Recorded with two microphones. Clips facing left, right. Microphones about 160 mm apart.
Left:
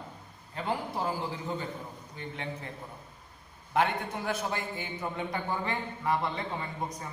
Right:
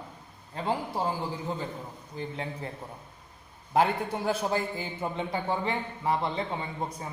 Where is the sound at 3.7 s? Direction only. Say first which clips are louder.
Right 3 dB; 35° right (ahead or behind).